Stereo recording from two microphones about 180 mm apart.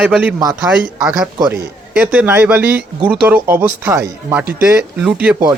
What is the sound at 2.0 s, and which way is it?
Speech, 10° right (ahead or behind).